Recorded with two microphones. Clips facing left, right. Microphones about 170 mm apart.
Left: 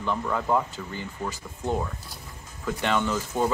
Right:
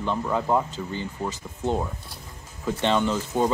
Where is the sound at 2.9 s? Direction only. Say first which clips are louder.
Right 3 dB; 25° right (ahead or behind).